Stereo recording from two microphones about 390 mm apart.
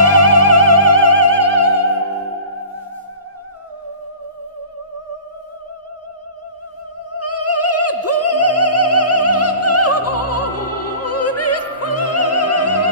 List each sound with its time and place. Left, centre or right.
0.0 s music: left
7.2 s opera: left